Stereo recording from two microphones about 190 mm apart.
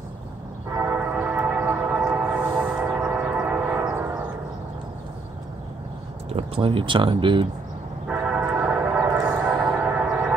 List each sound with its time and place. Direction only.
0.7 s train: 10° right (ahead or behind)
6.2 s speech: 30° right (ahead or behind)
8.1 s a sound: 10° right (ahead or behind)
9.7 s music: 5° right (ahead or behind)